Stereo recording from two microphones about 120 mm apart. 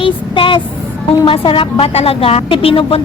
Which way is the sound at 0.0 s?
45° left (ahead or behind).